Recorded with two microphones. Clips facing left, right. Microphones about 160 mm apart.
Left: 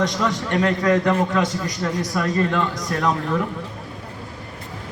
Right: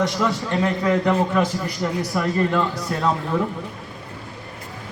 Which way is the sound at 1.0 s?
10° right (ahead or behind).